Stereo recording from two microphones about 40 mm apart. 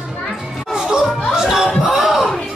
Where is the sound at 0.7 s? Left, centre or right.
Centre.